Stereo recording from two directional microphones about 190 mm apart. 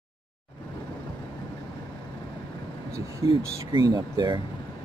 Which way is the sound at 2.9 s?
15° right (ahead or behind).